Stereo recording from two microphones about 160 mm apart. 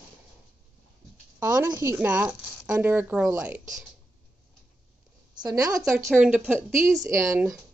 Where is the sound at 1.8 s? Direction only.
15° right (ahead or behind).